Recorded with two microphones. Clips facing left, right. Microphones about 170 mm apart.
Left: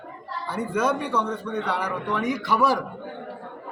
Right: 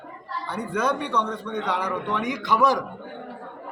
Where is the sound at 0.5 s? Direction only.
10° left (ahead or behind).